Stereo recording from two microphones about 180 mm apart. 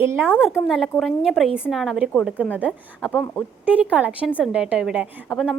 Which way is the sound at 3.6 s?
5° right (ahead or behind).